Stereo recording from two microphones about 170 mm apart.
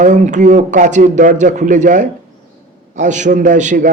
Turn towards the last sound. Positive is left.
turn(degrees=-45)  # may be behind; listen again after turning